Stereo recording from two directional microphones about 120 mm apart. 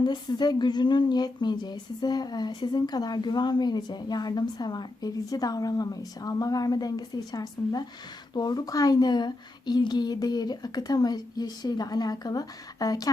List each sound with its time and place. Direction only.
0.0 s speech: 35° left (ahead or behind)